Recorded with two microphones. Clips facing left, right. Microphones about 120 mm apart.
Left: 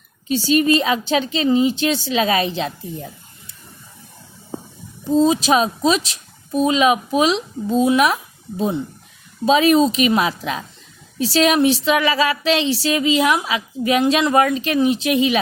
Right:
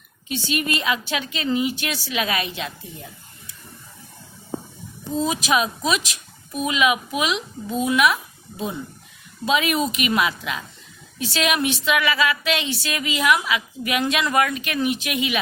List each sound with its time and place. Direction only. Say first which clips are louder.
0.3 s a woman's voice: left 9 dB; 35° left (ahead or behind)
5.1 s a woman's voice: left 7 dB; 30° left (ahead or behind)